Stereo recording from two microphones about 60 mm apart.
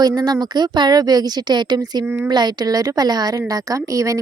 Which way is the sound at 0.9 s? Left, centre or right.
Right.